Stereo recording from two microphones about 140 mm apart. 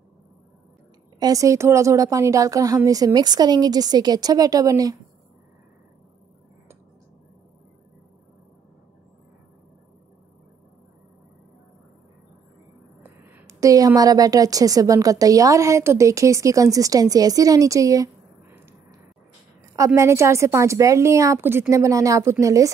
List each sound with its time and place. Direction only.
1.2 s a woman's voice: 25° right (ahead or behind)
13.0 s a woman's voice: 20° right (ahead or behind)
20.0 s a woman's voice: 20° right (ahead or behind)